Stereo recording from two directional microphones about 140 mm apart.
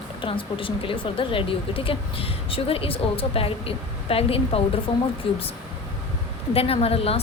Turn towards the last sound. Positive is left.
turn(degrees=45)  # may be behind; listen again after turning